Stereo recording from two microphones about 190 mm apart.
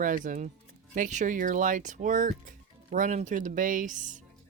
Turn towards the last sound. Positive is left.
turn(degrees=-40)  # may be behind; listen again after turning